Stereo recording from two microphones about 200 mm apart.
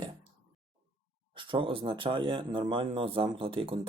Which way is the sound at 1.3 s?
25° right (ahead or behind).